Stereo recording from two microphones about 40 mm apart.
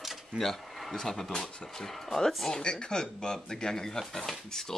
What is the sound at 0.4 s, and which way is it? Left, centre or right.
Speech, centre.